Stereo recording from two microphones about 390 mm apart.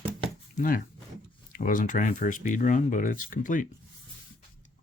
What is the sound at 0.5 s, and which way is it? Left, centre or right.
Speech, left.